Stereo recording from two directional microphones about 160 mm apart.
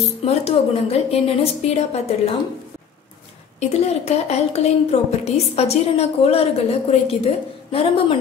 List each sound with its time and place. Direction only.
0.2 s a woman's voice: 40° left (ahead or behind)
3.5 s a woman's voice: 40° left (ahead or behind)